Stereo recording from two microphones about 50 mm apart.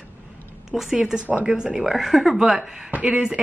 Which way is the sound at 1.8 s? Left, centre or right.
Centre.